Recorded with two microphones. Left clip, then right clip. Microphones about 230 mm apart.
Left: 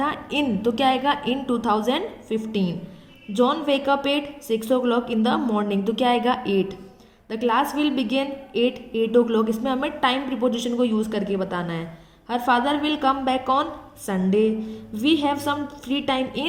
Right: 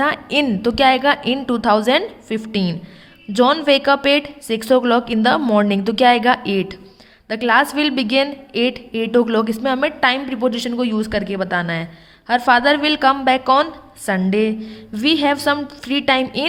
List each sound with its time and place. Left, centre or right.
0.3 s a woman's voice: right